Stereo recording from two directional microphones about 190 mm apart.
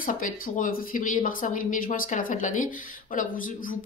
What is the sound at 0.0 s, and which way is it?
Speech, 45° left (ahead or behind).